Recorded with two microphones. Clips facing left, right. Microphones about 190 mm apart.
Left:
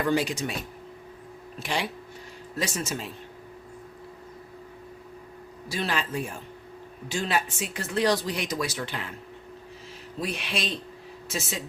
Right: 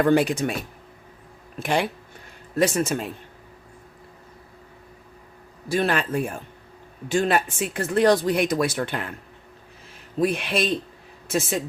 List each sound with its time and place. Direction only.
0.0 s a man's voice: 55° right (ahead or behind)
1.5 s a man's voice: 55° right (ahead or behind)
5.6 s a man's voice: 55° right (ahead or behind)
10.2 s speech: 55° right (ahead or behind)